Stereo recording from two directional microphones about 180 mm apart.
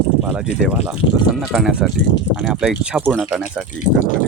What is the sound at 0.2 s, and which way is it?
Speech, 5° right (ahead or behind).